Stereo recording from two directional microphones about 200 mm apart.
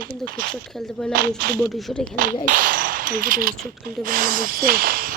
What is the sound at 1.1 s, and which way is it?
Speech, 50° right (ahead or behind).